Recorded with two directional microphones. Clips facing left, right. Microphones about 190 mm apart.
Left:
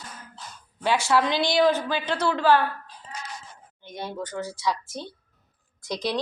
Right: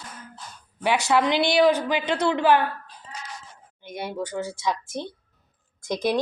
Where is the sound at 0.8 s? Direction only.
15° right (ahead or behind).